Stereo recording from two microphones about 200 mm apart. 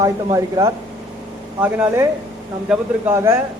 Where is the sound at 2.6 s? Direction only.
15° right (ahead or behind).